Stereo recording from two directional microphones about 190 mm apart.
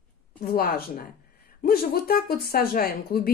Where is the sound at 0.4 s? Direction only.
50° left (ahead or behind).